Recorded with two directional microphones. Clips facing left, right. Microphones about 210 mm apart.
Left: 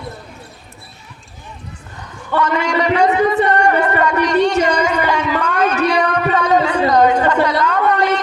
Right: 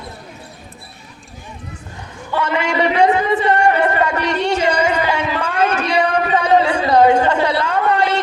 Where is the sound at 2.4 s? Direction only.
25° right (ahead or behind).